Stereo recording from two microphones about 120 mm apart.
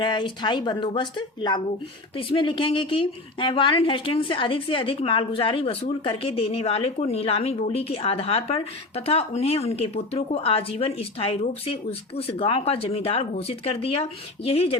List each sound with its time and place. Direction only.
0.0 s a woman's voice: 40° left (ahead or behind); by 14.8 s 55° left (ahead or behind)